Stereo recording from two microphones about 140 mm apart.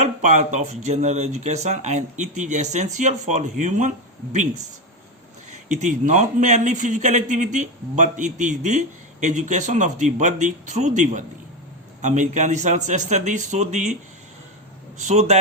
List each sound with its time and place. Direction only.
0.0 s speech: 55° right (ahead or behind)
5.5 s speech: 55° right (ahead or behind)
14.9 s speech: 55° right (ahead or behind)